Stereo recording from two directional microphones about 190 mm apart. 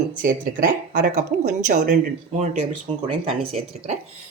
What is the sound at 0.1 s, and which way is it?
A woman's voice, 45° right (ahead or behind).